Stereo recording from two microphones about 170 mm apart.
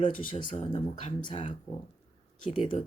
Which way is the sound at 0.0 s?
30° left (ahead or behind).